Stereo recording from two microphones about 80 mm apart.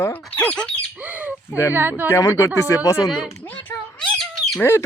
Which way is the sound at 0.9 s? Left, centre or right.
Right.